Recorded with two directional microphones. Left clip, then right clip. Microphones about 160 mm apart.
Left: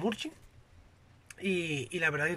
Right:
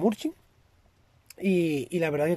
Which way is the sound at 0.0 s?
35° right (ahead or behind).